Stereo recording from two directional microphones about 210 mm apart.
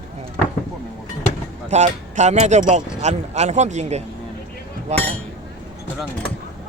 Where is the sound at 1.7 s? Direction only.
35° right (ahead or behind).